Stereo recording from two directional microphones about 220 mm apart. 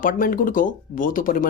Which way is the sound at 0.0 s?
40° left (ahead or behind).